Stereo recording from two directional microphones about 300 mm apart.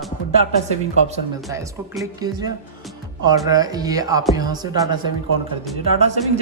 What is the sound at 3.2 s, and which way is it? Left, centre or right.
A man's voice, centre.